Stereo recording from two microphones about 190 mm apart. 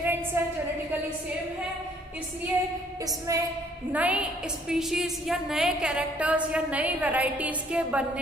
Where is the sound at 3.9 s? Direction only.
10° right (ahead or behind).